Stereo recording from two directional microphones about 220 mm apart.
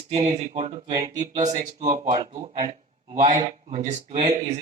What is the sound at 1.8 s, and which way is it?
Speech, 20° right (ahead or behind).